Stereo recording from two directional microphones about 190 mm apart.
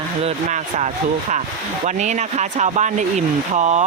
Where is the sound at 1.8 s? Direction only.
40° right (ahead or behind).